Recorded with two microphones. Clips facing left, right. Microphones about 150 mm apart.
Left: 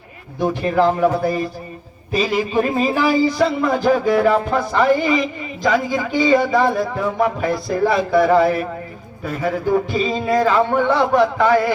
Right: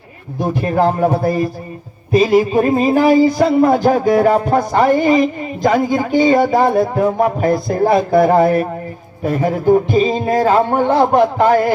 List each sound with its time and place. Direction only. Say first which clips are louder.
0.6 s a man's voice: right 1 dB; 40° right (ahead or behind)